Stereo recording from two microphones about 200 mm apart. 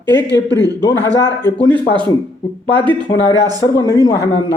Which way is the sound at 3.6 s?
15° left (ahead or behind).